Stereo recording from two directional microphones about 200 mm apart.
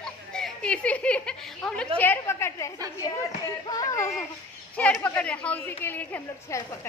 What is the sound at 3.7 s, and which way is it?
A woman's voice, 15° left (ahead or behind).